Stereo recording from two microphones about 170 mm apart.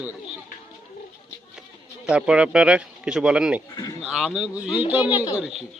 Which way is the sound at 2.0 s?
5° right (ahead or behind).